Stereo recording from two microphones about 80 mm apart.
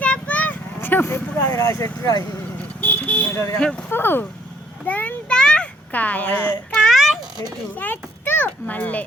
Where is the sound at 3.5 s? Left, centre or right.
Centre.